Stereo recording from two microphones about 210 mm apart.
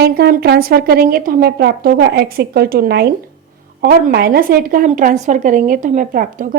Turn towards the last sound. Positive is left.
turn(degrees=-40)  # may be behind; listen again after turning